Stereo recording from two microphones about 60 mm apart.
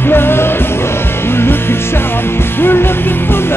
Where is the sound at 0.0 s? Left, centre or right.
Left.